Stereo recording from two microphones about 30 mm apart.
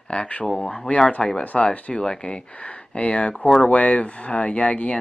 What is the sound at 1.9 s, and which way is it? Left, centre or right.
Speech, left.